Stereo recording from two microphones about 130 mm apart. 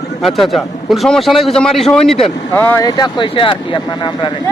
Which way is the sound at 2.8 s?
35° left (ahead or behind).